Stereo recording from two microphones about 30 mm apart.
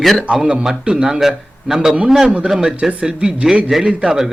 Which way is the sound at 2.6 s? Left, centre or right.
Right.